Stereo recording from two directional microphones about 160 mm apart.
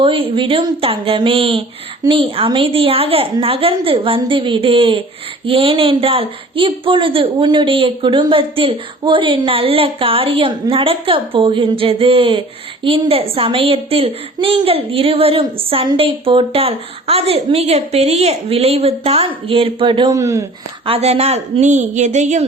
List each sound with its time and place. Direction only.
0.0 s a woman's voice: 35° right (ahead or behind)
20.8 s a woman's voice: 40° right (ahead or behind)